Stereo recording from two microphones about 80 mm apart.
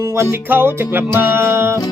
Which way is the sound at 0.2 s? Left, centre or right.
Right.